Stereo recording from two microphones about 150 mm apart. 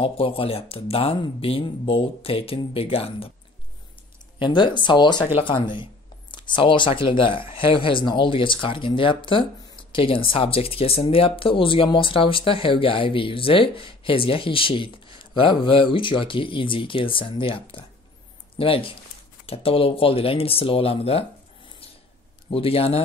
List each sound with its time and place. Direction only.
0.0 s speech: 40° left (ahead or behind)
4.4 s speech: 30° left (ahead or behind)